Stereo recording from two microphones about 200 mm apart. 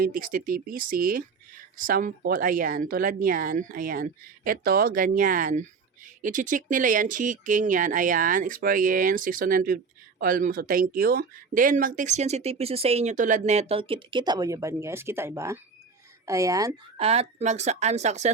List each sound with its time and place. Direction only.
0.0 s speech: 45° right (ahead or behind); by 16.7 s 15° right (ahead or behind)
17.0 s speech: 30° right (ahead or behind)